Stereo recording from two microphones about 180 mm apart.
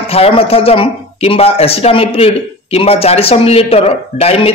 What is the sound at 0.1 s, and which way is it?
Speech, 35° left (ahead or behind).